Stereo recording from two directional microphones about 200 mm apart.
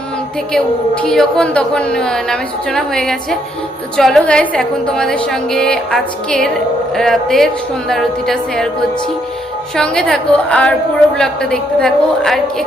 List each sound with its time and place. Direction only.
1.0 s a woman's voice: 5° left (ahead or behind)
9.7 s a woman's voice: 5° left (ahead or behind)